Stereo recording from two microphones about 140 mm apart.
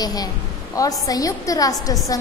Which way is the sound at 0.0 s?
25° left (ahead or behind).